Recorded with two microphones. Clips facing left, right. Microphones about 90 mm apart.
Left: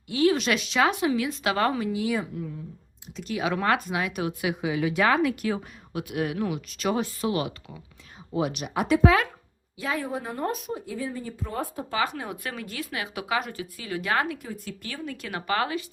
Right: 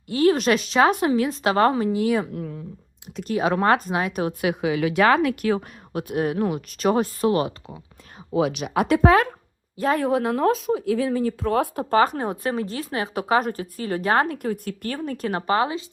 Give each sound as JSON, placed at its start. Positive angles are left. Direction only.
{"t": 0.1, "sound": "a woman's voice", "side_deg": -45}
{"t": 3.2, "sound": "a woman's voice", "side_deg": -40}
{"t": 4.6, "sound": "speech", "side_deg": -85}
{"t": 6.0, "sound": "speech", "side_deg": -40}
{"t": 8.6, "sound": "speech", "side_deg": -75}
{"t": 9.0, "sound": "a woman's voice", "side_deg": -40}
{"t": 10.0, "sound": "speech", "side_deg": -80}
{"t": 11.9, "sound": "a woman's voice", "side_deg": -45}
{"t": 14.3, "sound": "speech", "side_deg": -60}
{"t": 15.5, "sound": "speech", "side_deg": -25}